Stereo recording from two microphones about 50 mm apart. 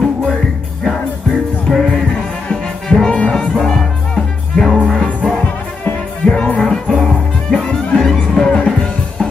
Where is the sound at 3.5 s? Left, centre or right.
Centre.